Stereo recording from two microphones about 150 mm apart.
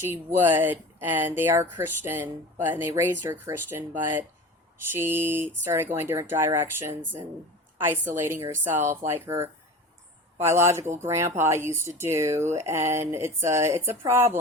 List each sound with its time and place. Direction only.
0.0 s speech: 15° right (ahead or behind)